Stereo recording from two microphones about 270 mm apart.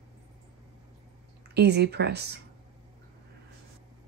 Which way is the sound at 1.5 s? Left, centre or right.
Right.